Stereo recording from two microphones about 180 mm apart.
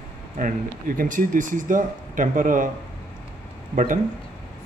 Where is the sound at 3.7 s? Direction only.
45° right (ahead or behind).